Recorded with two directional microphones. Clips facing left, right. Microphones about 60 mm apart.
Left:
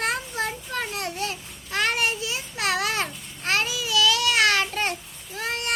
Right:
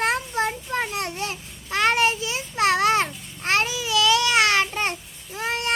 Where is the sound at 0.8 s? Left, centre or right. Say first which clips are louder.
Even; right.